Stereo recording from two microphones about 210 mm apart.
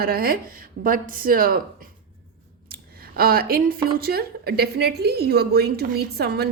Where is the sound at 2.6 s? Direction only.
45° right (ahead or behind).